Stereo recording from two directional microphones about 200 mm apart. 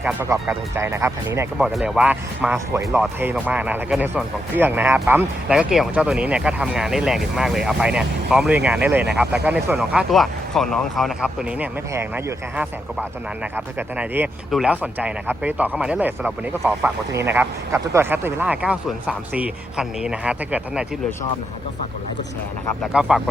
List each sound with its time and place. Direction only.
0.0 s speech: 10° right (ahead or behind)
22.8 s speech: 5° right (ahead or behind)